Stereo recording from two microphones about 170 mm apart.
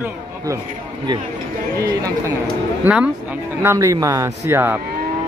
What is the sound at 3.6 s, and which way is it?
A man's voice, 20° right (ahead or behind).